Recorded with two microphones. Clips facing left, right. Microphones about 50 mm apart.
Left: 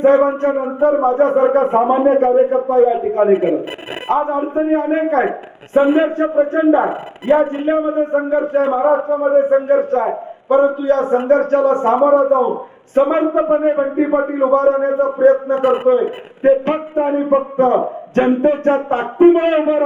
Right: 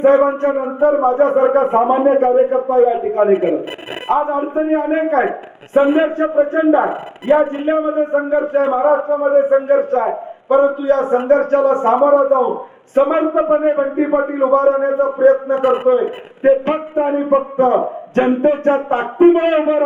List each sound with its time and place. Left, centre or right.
0.0 s a man's voice: centre
5.7 s a man's voice: centre
6.0 s a man's voice: centre
6.8 s speech: centre
7.6 s a man's voice: right
15.5 s a man's voice: centre
15.9 s speech: centre